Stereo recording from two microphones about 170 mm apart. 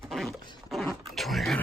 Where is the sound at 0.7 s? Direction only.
Centre (ahead or behind).